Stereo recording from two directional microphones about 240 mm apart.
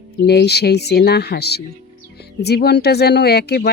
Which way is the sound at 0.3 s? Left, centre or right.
Left.